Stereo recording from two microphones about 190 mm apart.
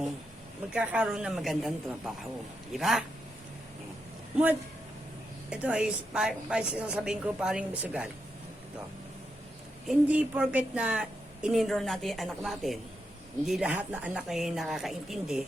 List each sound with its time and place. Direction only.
0.7 s a woman's voice: 5° right (ahead or behind)
5.5 s a woman's voice: 5° right (ahead or behind)
9.8 s a woman's voice: 5° right (ahead or behind)